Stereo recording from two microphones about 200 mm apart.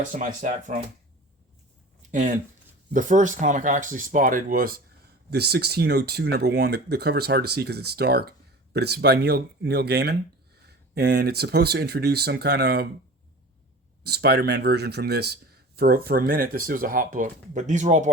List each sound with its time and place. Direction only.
0.1 s speech: 40° right (ahead or behind)
2.0 s a sound: 40° right (ahead or behind)
2.9 s speech: 40° right (ahead or behind)
5.3 s speech: 55° right (ahead or behind)
14.0 s speech: 55° right (ahead or behind); by 18.1 s 35° right (ahead or behind)